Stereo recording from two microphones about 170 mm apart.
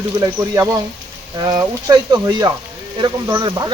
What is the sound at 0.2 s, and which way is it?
Speech, 15° right (ahead or behind).